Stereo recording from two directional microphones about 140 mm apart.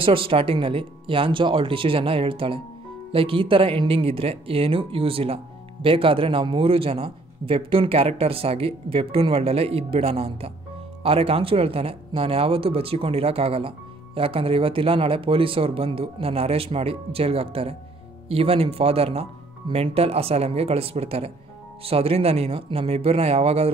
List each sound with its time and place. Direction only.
0.0 s speech: 40° right (ahead or behind)